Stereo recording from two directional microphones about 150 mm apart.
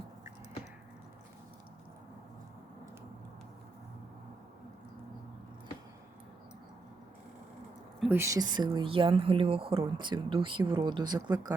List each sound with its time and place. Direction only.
8.1 s speech: 20° right (ahead or behind)